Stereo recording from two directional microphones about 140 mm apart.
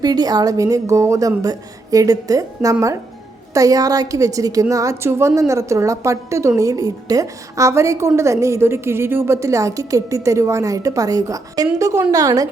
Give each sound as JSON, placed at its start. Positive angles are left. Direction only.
{"t": 0.0, "sound": "a woman's voice", "side_deg": -30}